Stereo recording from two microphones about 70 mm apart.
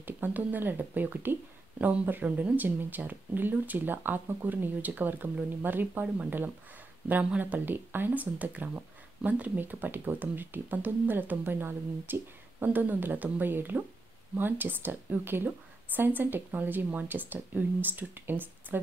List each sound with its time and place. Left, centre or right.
0.0 s speech: right